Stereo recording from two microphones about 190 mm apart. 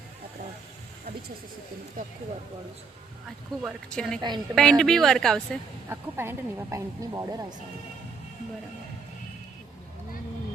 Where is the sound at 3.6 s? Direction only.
Centre (ahead or behind).